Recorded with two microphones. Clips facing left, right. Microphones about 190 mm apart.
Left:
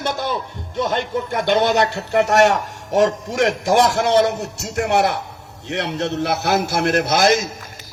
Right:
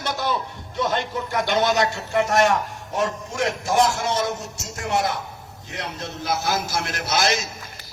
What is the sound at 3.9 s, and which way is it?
A man's voice, 65° left (ahead or behind).